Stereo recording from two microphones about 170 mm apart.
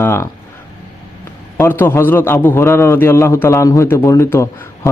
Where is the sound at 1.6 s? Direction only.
15° left (ahead or behind).